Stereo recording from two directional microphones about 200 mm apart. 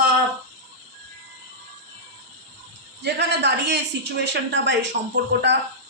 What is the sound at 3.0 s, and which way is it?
A woman's voice, 55° right (ahead or behind).